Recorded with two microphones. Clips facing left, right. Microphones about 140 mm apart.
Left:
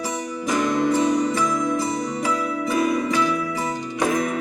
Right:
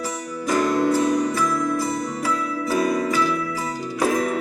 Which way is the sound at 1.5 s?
15° left (ahead or behind).